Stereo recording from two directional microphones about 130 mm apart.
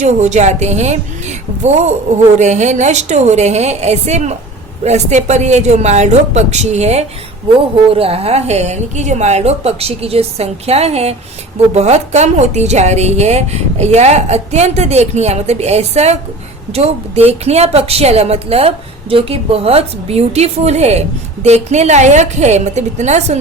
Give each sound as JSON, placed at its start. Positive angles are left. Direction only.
{"t": 0.0, "sound": "a woman's voice", "side_deg": -65}
{"t": 7.9, "sound": "a woman's voice", "side_deg": -50}